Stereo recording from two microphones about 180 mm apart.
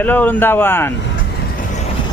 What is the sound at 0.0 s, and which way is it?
Speech, 10° left (ahead or behind).